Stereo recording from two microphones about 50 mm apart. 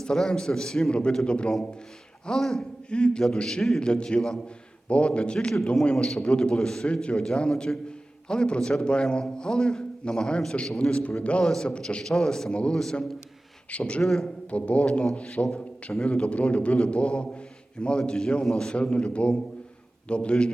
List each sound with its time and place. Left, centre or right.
0.0 s a man's voice: centre
2.2 s a man's voice: centre
2.9 s a man's voice: centre
12.7 s a man's voice: centre
13.7 s a man's voice: left
14.0 s a man's voice: centre
14.5 s a man's voice: left